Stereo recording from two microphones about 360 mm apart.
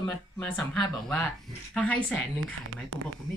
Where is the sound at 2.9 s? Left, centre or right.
Right.